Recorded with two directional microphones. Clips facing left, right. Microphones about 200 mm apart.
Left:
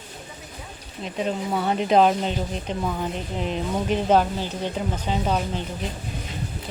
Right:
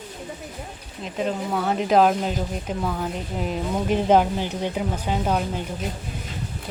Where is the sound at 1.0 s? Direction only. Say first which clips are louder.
Even; centre (ahead or behind).